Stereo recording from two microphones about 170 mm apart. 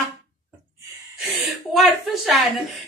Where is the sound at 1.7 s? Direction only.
Centre (ahead or behind).